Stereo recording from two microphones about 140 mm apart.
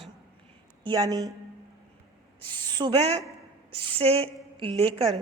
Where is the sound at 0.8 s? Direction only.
30° right (ahead or behind).